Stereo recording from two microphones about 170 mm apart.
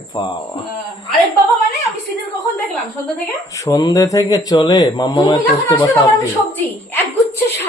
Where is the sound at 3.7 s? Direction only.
20° left (ahead or behind).